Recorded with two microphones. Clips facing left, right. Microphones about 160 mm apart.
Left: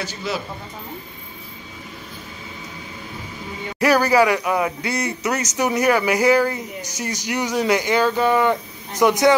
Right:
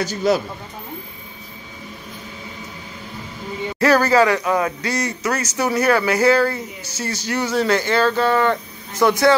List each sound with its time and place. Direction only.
0.0 s speech: 40° right (ahead or behind)
3.8 s a man's voice: 15° left (ahead or behind)